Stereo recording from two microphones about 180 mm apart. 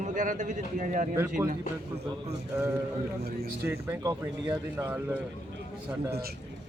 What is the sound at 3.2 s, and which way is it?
Speech, 60° right (ahead or behind).